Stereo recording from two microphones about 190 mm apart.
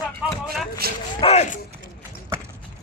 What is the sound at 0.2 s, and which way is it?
Vehicle, 5° right (ahead or behind).